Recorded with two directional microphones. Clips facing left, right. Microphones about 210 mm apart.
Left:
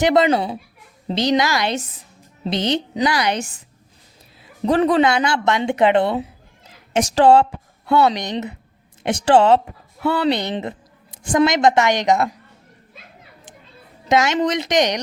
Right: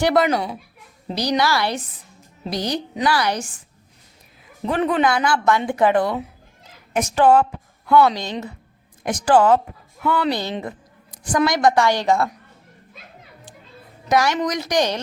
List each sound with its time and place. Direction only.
0.0 s speech: 25° left (ahead or behind)
4.6 s a woman's voice: 35° left (ahead or behind); by 12.3 s 20° left (ahead or behind)
14.1 s speech: 25° left (ahead or behind)